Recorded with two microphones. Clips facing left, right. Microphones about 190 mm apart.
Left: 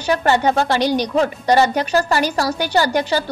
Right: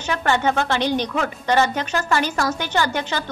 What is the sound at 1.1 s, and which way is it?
A woman's voice, 35° left (ahead or behind).